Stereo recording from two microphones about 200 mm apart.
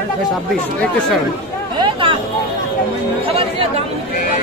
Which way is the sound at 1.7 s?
25° right (ahead or behind).